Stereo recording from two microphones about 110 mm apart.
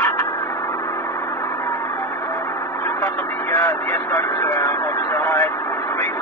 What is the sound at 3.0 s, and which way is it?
Vehicle, 25° left (ahead or behind).